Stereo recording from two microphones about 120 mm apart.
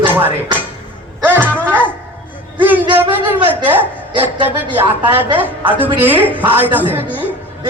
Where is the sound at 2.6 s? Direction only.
15° right (ahead or behind).